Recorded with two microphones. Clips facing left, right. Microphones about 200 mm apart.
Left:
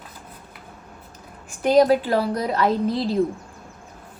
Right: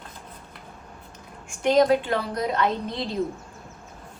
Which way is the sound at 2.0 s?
35° left (ahead or behind).